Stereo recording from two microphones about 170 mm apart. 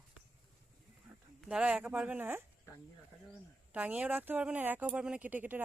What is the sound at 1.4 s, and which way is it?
Speech, 5° right (ahead or behind).